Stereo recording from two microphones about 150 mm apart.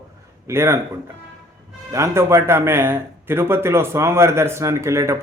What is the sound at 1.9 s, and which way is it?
Speech, 20° right (ahead or behind).